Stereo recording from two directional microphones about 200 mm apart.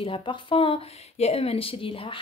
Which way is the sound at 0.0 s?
25° left (ahead or behind).